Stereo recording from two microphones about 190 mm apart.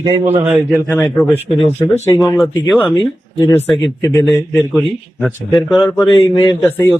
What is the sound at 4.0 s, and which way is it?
Speech, 20° left (ahead or behind).